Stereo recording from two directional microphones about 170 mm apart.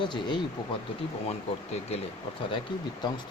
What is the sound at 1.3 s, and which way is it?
Speech, 40° left (ahead or behind).